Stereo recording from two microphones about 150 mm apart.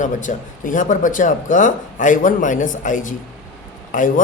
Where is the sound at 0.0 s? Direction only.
55° left (ahead or behind).